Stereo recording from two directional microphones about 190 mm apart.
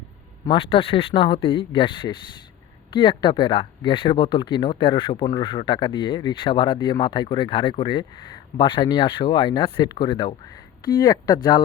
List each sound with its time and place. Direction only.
0.4 s speech: 30° left (ahead or behind)